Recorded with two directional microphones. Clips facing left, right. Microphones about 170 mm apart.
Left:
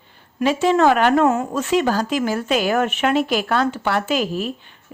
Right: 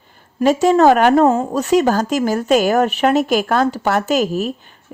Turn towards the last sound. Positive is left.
turn(degrees=-40)  # may be behind; listen again after turning